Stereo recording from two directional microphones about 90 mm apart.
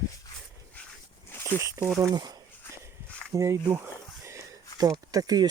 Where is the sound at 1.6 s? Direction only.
35° right (ahead or behind).